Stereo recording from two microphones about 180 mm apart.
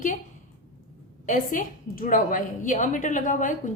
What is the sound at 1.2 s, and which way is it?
A woman's voice, 45° left (ahead or behind).